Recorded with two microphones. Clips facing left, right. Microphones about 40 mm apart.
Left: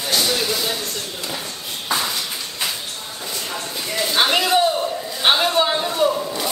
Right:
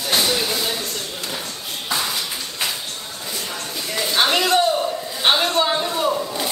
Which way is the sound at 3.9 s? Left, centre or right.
Centre.